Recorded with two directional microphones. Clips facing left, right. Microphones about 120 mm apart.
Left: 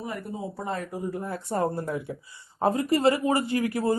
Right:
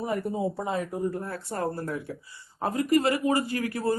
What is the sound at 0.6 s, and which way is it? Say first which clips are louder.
Speech: right 2 dB; 15° right (ahead or behind).